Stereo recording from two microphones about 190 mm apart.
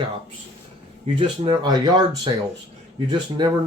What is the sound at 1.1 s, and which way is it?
Speech, 25° right (ahead or behind).